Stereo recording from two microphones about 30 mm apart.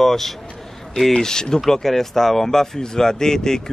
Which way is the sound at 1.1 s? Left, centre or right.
Left.